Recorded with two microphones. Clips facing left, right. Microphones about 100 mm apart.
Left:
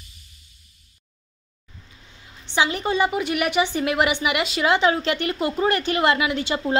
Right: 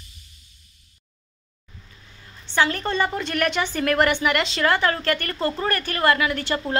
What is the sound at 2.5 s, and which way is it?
A woman's voice, 15° left (ahead or behind).